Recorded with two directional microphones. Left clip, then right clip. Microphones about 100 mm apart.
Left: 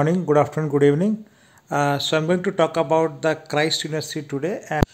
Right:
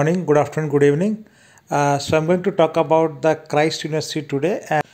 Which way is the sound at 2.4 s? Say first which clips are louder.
Right 3 dB; 25° right (ahead or behind).